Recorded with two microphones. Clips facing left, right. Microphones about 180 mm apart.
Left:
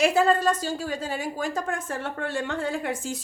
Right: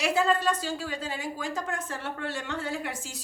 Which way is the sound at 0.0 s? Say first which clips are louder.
Left 5 dB; 45° left (ahead or behind).